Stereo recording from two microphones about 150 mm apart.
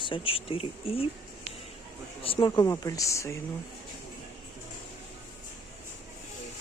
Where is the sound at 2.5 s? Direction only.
20° left (ahead or behind).